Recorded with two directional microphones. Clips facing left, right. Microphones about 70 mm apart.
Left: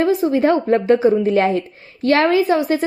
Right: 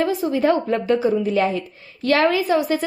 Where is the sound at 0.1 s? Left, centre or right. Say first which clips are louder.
Left 3 dB; left.